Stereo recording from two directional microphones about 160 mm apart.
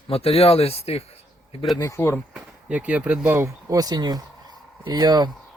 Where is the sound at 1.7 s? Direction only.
20° left (ahead or behind).